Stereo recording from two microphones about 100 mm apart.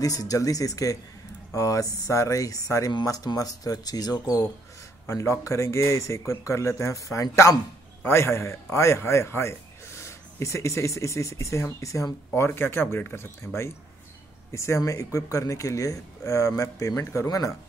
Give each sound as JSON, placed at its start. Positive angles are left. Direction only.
{"t": 0.0, "sound": "speech", "side_deg": 35}
{"t": 2.9, "sound": "speech", "side_deg": 45}
{"t": 5.0, "sound": "a man's voice", "side_deg": 30}
{"t": 14.5, "sound": "a man's voice", "side_deg": 30}